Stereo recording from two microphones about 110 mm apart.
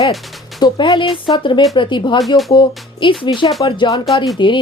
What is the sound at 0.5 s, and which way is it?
Speech, 40° left (ahead or behind).